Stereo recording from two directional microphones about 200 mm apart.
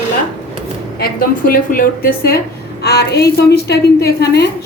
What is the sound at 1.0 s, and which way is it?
A woman's voice, 45° left (ahead or behind).